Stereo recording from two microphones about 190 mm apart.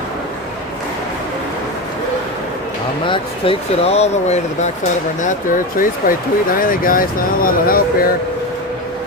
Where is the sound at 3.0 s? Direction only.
25° left (ahead or behind); by 7.8 s 50° left (ahead or behind).